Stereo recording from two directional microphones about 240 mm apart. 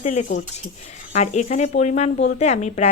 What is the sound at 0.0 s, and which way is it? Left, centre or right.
Speech, left.